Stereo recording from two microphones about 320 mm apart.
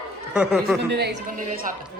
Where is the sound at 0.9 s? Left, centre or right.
Right.